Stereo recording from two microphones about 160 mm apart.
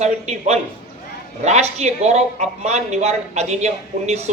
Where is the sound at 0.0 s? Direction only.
45° right (ahead or behind).